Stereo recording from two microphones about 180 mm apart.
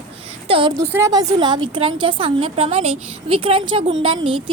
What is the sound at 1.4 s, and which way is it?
A woman's voice, 25° right (ahead or behind).